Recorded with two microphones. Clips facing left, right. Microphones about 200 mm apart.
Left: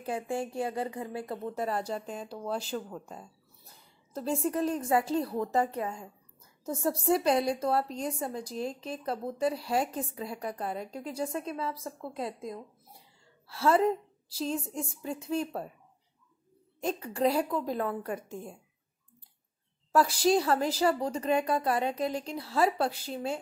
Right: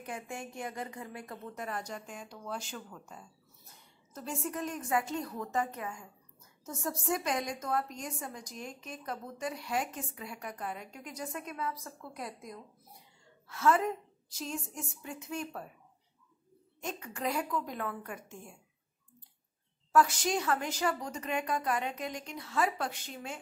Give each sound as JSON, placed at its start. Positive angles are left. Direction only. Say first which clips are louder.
{"t": 0.0, "sound": "a woman's voice", "louder": "left 8 dB", "side_deg": 30}
{"t": 16.8, "sound": "a woman's voice", "louder": "left 8 dB", "side_deg": 35}
{"t": 19.9, "sound": "a woman's voice", "louder": "left 4 dB", "side_deg": 35}